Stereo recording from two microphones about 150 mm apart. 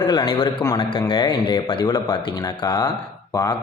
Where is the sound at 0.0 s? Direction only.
35° left (ahead or behind).